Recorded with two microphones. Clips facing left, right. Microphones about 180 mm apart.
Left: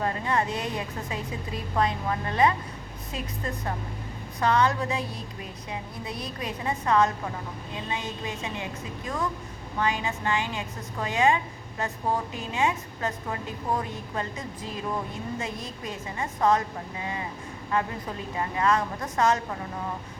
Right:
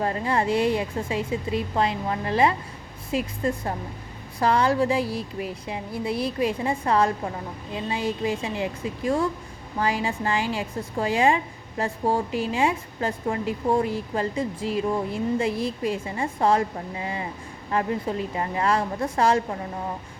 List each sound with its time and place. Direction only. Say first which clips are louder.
0.0 s a woman's voice: right 3 dB; 30° right (ahead or behind)